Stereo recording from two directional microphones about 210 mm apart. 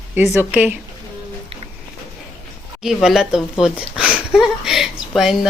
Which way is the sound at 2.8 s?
Centre (ahead or behind).